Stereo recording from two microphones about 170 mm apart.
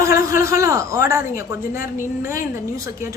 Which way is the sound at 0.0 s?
20° right (ahead or behind).